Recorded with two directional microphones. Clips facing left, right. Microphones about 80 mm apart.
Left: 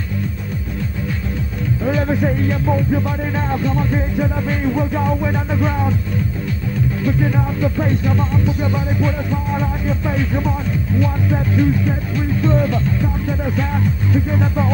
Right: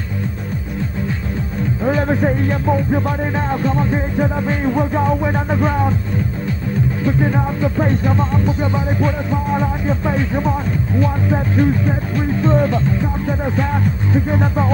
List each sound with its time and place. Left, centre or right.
1.8 s music: right
7.1 s music: right